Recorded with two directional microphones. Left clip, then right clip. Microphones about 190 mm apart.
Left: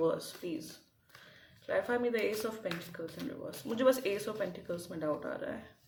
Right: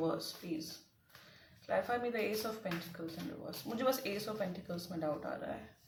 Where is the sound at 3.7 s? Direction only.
45° left (ahead or behind).